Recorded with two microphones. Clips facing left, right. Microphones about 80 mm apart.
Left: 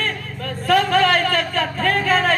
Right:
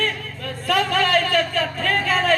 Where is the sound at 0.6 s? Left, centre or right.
Left.